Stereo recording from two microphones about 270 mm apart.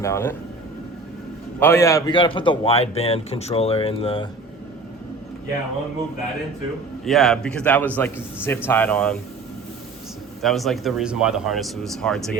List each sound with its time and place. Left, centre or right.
0.0 s speech: centre
1.5 s a man's voice: centre
7.0 s a man's voice: centre
10.4 s a man's voice: centre